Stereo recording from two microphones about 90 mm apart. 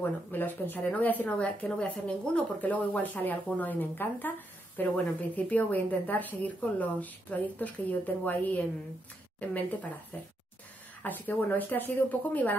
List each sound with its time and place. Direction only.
0.3 s a woman's voice: 20° left (ahead or behind)